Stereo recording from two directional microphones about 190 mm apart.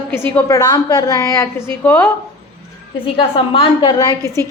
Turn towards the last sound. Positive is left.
turn(degrees=15)  # may be behind; listen again after turning